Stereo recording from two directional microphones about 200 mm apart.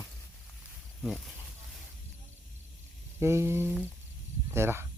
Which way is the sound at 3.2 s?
10° right (ahead or behind).